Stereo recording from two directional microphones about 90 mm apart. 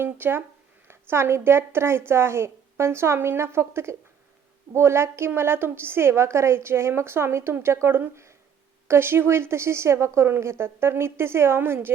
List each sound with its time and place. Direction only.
0.0 s a woman's voice: 25° right (ahead or behind)